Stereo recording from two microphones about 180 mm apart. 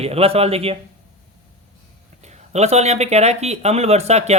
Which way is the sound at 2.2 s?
40° right (ahead or behind).